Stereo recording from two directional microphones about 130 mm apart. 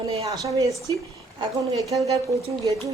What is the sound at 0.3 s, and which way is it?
A woman's voice, 25° right (ahead or behind).